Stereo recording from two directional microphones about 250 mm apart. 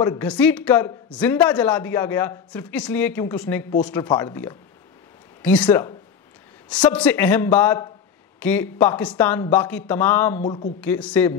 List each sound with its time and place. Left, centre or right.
0.0 s speech: centre
6.9 s a man's voice: centre
10.4 s speech: left
10.8 s speech: centre